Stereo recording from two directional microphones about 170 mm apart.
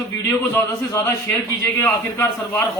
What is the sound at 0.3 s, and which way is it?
A man's voice, 15° left (ahead or behind).